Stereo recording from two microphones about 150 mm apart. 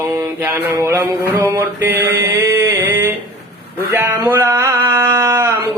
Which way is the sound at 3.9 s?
15° right (ahead or behind).